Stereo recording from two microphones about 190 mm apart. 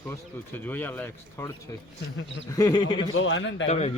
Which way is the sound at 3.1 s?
90° left.